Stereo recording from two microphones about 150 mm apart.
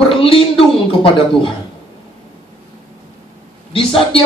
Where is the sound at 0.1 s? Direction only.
35° left (ahead or behind).